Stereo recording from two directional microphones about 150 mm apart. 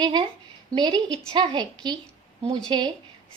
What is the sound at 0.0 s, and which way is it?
A woman's voice, 30° right (ahead or behind).